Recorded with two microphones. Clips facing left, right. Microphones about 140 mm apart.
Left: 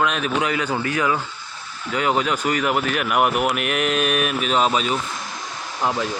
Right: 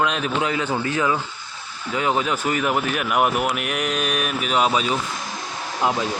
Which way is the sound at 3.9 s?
15° right (ahead or behind).